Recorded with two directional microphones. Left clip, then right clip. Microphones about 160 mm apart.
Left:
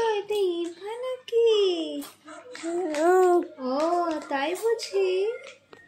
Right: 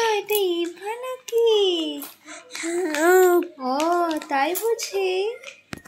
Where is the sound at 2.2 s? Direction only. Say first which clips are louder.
Right 4 dB; 20° left (ahead or behind).